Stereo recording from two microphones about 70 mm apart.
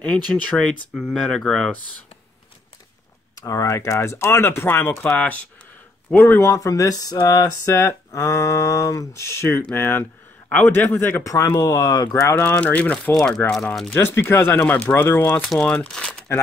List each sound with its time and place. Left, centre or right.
0.5 s a man's voice: left
1.0 s speech: centre
3.3 s speech: left
6.4 s speech: left
7.2 s a man's voice: left
11.2 s speech: left
12.4 s a man's voice: left
13.4 s speech: left
15.6 s speech: centre